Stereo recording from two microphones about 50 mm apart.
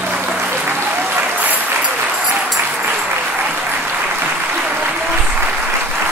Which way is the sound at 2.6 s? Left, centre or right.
Right.